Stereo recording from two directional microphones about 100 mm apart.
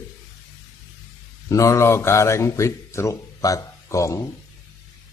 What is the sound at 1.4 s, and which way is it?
Speech, 35° left (ahead or behind).